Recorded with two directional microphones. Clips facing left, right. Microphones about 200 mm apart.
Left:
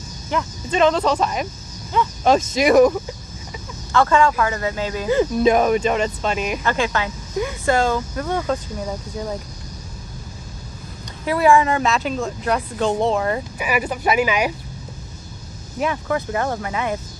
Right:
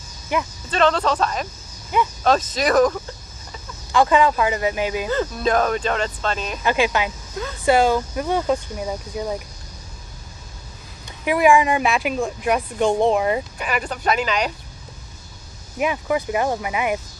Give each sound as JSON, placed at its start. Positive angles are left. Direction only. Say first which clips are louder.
{"t": 0.3, "sound": "speech", "louder": "even", "side_deg": -15}
{"t": 0.7, "sound": "speech", "louder": "left 2 dB", "side_deg": 10}
{"t": 1.9, "sound": "speech", "louder": "even", "side_deg": -15}
{"t": 2.2, "sound": "speech", "louder": "left 5 dB", "side_deg": 10}
{"t": 3.9, "sound": "speech", "louder": "even", "side_deg": -15}
{"t": 5.0, "sound": "speech", "louder": "left 5 dB", "side_deg": 15}
{"t": 6.6, "sound": "speech", "louder": "right 2 dB", "side_deg": -15}
{"t": 11.1, "sound": "speech", "louder": "even", "side_deg": -15}
{"t": 13.6, "sound": "speech", "louder": "left 3 dB", "side_deg": 10}
{"t": 15.8, "sound": "speech", "louder": "right 1 dB", "side_deg": -15}